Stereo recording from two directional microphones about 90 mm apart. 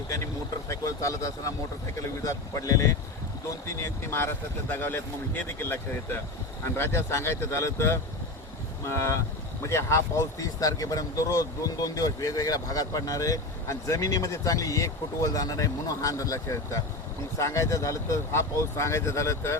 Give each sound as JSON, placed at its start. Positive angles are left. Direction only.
{"t": 0.7, "sound": "speech", "side_deg": 35}